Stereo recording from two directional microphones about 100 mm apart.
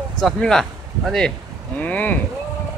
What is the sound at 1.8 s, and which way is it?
Speech, 15° left (ahead or behind).